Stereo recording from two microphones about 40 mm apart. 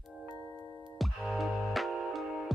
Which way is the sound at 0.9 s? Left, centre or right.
Centre.